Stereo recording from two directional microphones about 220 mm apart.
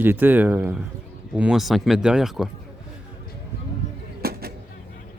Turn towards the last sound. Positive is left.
turn(degrees=-45)  # may be behind; listen again after turning